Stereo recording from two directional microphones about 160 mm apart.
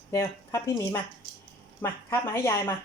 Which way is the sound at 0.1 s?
15° left (ahead or behind).